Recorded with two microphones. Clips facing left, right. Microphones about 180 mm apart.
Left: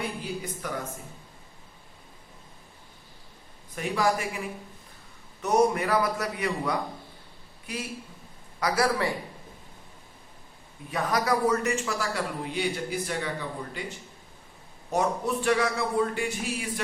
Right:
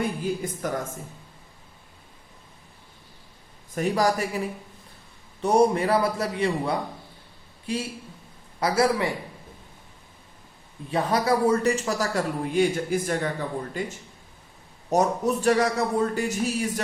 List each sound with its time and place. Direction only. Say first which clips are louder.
0.6 s a man's voice: right 6 dB; 45° right (ahead or behind)
3.8 s a man's voice: right 4 dB; 40° right (ahead or behind); by 9.1 s 20° right (ahead or behind)
10.9 s a man's voice: right 3 dB; 30° right (ahead or behind)